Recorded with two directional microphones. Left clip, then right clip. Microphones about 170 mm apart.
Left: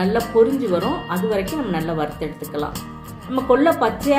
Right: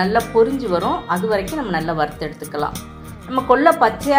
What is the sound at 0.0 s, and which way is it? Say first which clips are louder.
A woman's voice: right 1 dB; 15° right (ahead or behind).